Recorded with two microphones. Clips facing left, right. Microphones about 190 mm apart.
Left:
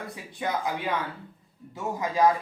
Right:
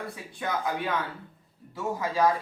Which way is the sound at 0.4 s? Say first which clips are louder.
Left 2 dB; 20° left (ahead or behind).